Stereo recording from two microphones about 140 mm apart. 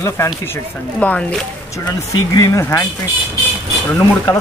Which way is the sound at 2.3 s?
20° left (ahead or behind).